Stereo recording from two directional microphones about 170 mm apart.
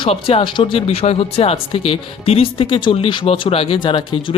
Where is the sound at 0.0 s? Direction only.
35° left (ahead or behind).